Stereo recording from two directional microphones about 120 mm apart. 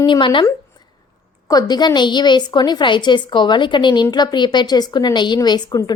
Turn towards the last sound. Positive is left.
turn(degrees=35)  # may be behind; listen again after turning